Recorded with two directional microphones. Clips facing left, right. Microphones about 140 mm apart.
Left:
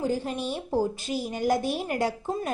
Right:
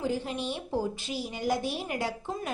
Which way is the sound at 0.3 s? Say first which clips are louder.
Left 3 dB; 45° left (ahead or behind).